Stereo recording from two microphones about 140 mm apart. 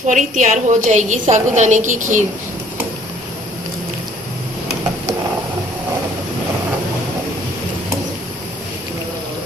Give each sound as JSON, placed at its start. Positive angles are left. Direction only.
{"t": 0.1, "sound": "a woman's voice", "side_deg": -60}